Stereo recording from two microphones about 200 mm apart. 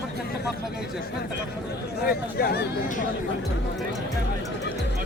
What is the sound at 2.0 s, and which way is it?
Speech, 50° left (ahead or behind).